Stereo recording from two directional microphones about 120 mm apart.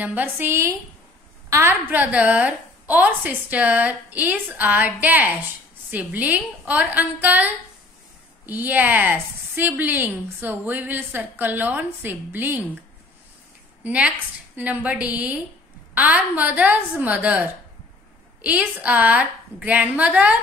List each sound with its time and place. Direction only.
0.0 s a woman's voice: 15° right (ahead or behind)
8.5 s a woman's voice: 15° right (ahead or behind)
13.8 s a woman's voice: 10° right (ahead or behind)